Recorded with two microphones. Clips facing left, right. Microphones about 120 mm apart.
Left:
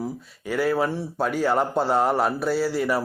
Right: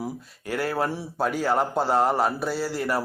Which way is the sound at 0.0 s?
Centre (ahead or behind).